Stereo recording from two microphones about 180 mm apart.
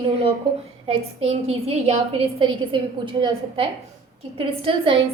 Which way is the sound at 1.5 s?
35° right (ahead or behind).